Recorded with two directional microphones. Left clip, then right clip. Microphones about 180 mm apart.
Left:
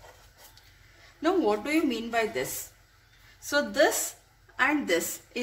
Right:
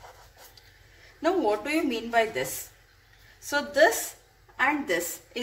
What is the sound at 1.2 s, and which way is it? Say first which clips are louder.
A woman's voice: right 1 dB; 15° left (ahead or behind).